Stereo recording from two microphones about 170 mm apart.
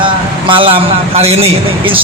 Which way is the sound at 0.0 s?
30° right (ahead or behind).